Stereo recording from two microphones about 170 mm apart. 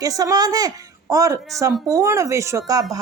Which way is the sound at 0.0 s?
20° right (ahead or behind).